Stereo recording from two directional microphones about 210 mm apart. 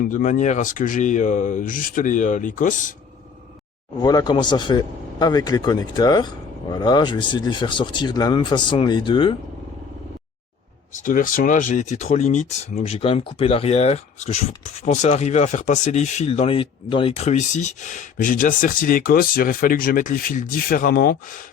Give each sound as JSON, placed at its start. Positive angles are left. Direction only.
{"t": 0.1, "sound": "speech", "side_deg": 40}
{"t": 4.0, "sound": "speech", "side_deg": 20}
{"t": 11.0, "sound": "speech", "side_deg": 40}